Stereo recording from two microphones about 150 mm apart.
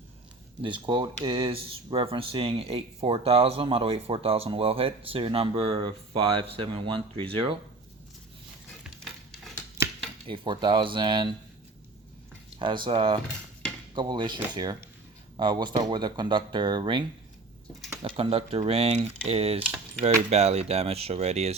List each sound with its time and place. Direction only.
0.6 s speech: 30° right (ahead or behind)
10.2 s speech: 35° right (ahead or behind)
12.5 s speech: 35° right (ahead or behind)